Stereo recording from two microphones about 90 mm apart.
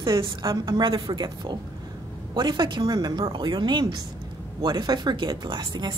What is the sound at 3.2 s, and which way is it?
A woman's voice, 65° right (ahead or behind).